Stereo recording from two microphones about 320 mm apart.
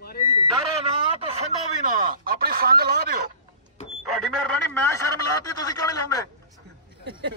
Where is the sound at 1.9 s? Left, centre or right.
Right.